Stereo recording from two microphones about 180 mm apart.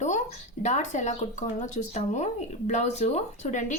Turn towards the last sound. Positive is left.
turn(degrees=40)  # may be behind; listen again after turning